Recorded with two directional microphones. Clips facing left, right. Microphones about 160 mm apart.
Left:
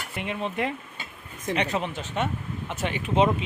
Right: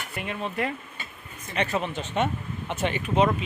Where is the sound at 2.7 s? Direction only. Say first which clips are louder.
Right 3 dB; centre (ahead or behind).